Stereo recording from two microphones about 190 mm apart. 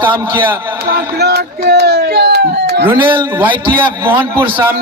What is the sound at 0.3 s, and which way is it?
Speech, 10° right (ahead or behind).